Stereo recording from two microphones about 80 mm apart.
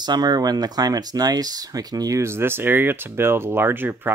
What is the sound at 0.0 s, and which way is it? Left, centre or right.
Speech, right.